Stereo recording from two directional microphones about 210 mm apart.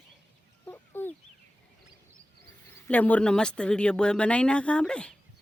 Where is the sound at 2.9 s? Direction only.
5° left (ahead or behind).